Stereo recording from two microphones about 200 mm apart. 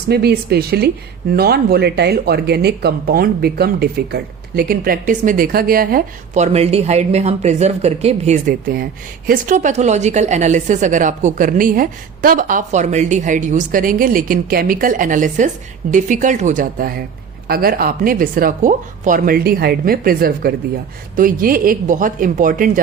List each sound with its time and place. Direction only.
0.1 s speech: 55° right (ahead or behind); by 8.4 s 30° right (ahead or behind)
8.4 s speech: 50° right (ahead or behind)